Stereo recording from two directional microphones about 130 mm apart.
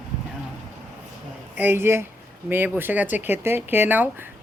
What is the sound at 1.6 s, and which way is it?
Speech, 15° right (ahead or behind).